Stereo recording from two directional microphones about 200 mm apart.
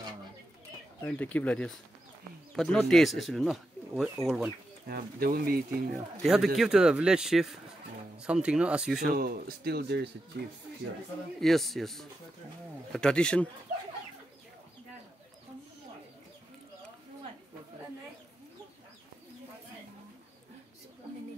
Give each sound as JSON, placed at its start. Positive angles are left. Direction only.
{"t": 1.0, "sound": "speech", "side_deg": 10}
{"t": 4.8, "sound": "speech", "side_deg": -45}
{"t": 6.2, "sound": "speech", "side_deg": 0}
{"t": 9.1, "sound": "speech", "side_deg": -50}
{"t": 11.3, "sound": "speech", "side_deg": 0}